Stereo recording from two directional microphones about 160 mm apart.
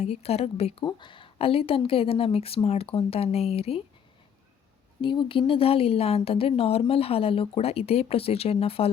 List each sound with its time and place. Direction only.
0.0 s speech: 40° left (ahead or behind)
4.9 s speech: 30° left (ahead or behind)